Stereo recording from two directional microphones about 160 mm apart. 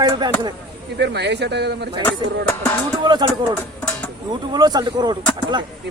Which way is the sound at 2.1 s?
15° left (ahead or behind).